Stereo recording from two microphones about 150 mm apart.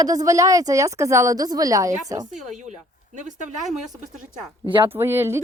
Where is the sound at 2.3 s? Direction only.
55° right (ahead or behind).